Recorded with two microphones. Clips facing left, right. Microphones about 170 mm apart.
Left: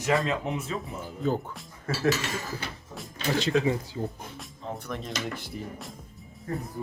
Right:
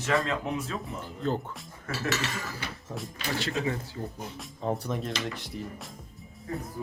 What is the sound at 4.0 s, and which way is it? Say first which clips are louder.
Speech: left 4 dB; 20° left (ahead or behind).